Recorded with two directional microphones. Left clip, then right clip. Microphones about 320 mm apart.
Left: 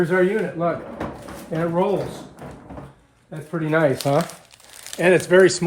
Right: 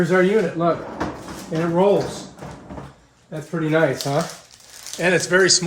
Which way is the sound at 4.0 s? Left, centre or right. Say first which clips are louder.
Left 2 dB; left.